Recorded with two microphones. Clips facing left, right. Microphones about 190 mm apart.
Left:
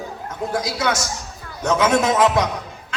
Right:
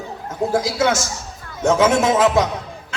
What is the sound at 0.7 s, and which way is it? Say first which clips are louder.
A man's voice: right 4 dB; 25° right (ahead or behind).